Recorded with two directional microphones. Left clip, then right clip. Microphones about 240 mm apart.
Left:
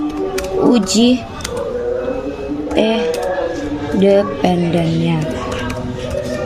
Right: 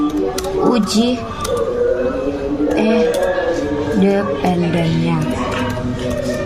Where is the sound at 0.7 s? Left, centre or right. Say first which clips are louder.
Left 3 dB; left.